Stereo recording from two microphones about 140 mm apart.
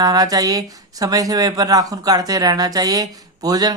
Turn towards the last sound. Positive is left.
turn(degrees=-25)  # may be behind; listen again after turning